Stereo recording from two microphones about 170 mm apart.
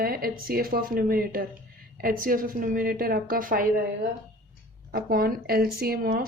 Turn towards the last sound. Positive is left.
turn(degrees=-60)  # may be behind; listen again after turning